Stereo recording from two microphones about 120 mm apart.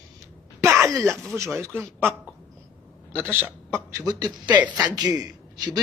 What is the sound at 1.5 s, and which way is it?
Speech, 20° right (ahead or behind).